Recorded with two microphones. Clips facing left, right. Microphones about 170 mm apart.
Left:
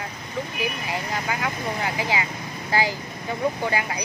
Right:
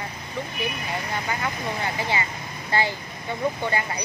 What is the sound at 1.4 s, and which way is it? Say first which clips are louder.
Speech: left 1 dB; 10° left (ahead or behind).